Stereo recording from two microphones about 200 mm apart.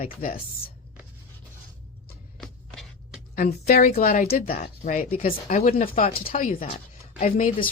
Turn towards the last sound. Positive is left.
turn(degrees=40)  # may be behind; listen again after turning